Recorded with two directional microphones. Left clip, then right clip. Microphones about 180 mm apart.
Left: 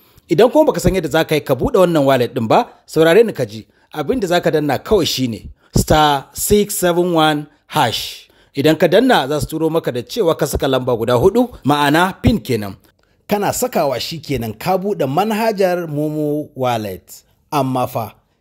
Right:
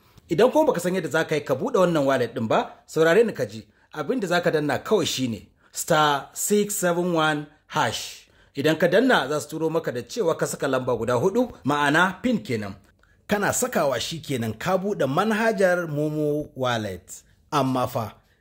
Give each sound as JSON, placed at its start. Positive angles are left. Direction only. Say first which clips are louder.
{"t": 0.3, "sound": "speech", "louder": "left 7 dB", "side_deg": 35}
{"t": 13.3, "sound": "speech", "louder": "left 6 dB", "side_deg": 30}
{"t": 17.5, "sound": "speech", "louder": "left 6 dB", "side_deg": 25}